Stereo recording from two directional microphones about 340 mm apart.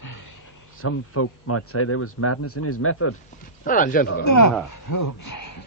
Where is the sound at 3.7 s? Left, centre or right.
Left.